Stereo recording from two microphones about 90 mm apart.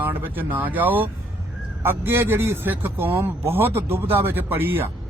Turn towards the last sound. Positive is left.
turn(degrees=-25)  # may be behind; listen again after turning